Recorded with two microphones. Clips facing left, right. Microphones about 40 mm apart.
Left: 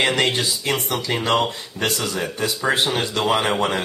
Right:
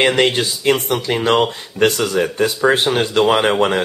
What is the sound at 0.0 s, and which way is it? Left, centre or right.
Speech, right.